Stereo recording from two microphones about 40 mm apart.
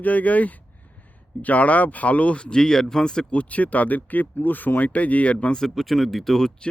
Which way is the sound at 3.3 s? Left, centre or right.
Left.